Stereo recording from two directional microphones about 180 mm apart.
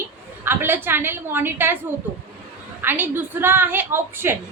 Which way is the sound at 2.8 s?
10° right (ahead or behind).